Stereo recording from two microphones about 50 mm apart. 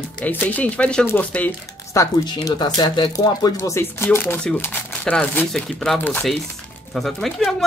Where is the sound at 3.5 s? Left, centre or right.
Left.